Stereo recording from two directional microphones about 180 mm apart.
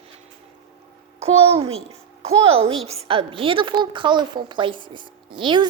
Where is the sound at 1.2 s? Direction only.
35° right (ahead or behind).